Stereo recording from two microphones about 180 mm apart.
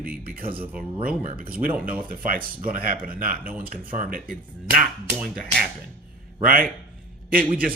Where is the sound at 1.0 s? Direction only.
50° right (ahead or behind).